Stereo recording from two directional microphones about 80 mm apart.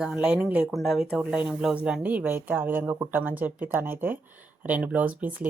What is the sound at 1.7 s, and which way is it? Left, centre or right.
Speech, centre.